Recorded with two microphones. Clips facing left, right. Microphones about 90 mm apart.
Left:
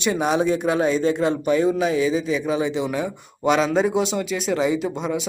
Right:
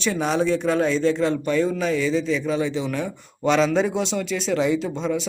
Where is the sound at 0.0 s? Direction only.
10° left (ahead or behind).